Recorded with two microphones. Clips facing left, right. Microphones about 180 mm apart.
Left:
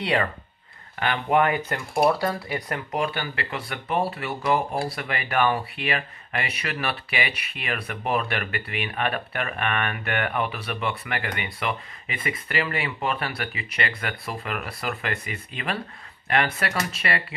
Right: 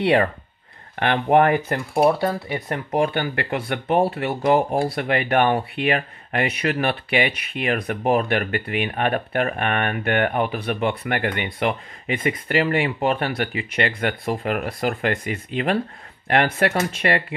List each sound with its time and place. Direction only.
0.0 s speech: 50° right (ahead or behind)
0.9 s speech: 60° right (ahead or behind)
1.7 s speech: 25° right (ahead or behind)
2.9 s speech: 50° right (ahead or behind)